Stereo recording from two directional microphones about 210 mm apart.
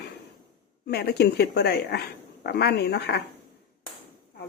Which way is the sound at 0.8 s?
50° left (ahead or behind).